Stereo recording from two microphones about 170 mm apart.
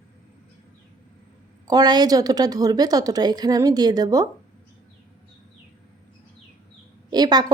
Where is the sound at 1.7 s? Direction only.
25° right (ahead or behind).